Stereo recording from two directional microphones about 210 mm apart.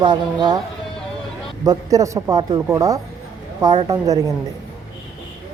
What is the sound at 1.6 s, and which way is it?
Speech, 15° right (ahead or behind).